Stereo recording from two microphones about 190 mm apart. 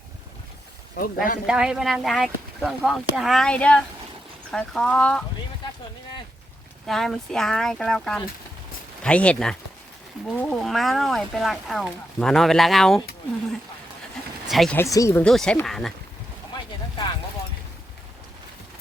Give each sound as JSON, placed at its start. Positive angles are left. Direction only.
{"t": 0.9, "sound": "speech", "side_deg": 50}
{"t": 1.5, "sound": "speech", "side_deg": -5}
{"t": 6.8, "sound": "speech", "side_deg": 0}
{"t": 14.4, "sound": "speech", "side_deg": 0}
{"t": 14.8, "sound": "speech", "side_deg": 15}
{"t": 15.2, "sound": "speech", "side_deg": 5}